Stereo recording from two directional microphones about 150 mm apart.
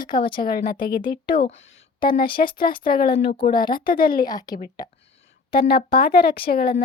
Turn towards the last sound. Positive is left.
turn(degrees=80)